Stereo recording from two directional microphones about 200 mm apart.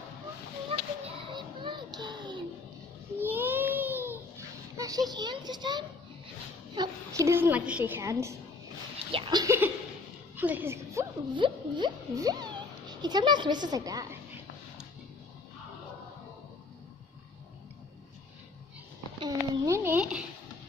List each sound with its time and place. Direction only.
1.0 s music: 25° right (ahead or behind)
3.2 s baby cry: 10° right (ahead or behind)
4.7 s a child's voice: 15° right (ahead or behind)
19.1 s a sound: 20° right (ahead or behind)